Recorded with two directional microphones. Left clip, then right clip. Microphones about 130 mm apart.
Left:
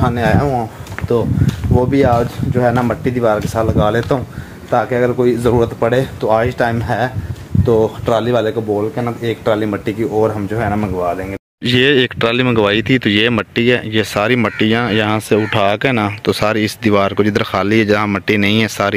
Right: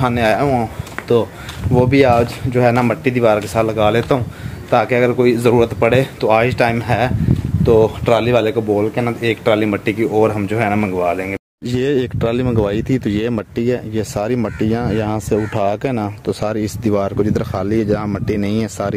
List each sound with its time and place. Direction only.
0.0 s speech: 5° right (ahead or behind)
3.1 s speech: 5° right (ahead or behind)
4.6 s speech: 15° right (ahead or behind)
8.7 s speech: 15° right (ahead or behind)
9.3 s speech: 5° right (ahead or behind)
11.6 s speech: centre (ahead or behind)